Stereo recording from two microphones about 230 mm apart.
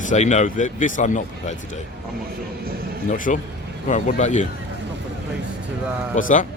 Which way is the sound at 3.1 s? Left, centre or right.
Left.